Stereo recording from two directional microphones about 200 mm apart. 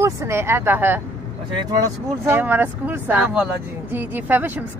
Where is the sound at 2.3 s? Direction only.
10° right (ahead or behind).